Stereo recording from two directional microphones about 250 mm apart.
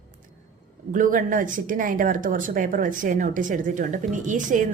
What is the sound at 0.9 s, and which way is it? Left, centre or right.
Speech, right.